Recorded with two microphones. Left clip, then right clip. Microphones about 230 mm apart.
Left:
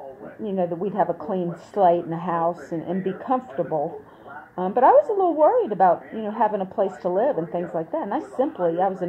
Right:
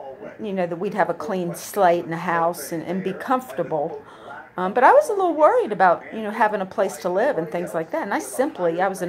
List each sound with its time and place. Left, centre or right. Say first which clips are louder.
0.5 s a woman's voice: even; right